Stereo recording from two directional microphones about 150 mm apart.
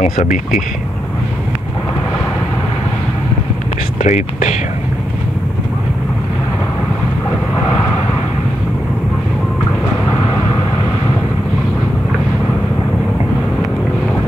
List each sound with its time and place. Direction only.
0.0 s speech: 60° left (ahead or behind)
4.0 s speech: 55° left (ahead or behind)